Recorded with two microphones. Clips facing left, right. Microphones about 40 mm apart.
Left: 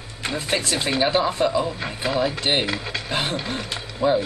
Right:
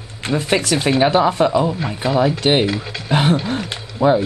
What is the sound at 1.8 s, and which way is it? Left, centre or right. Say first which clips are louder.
Speech: right 5 dB; centre.